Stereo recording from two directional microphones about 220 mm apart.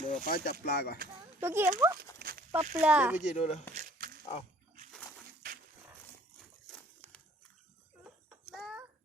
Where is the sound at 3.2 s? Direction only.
30° left (ahead or behind).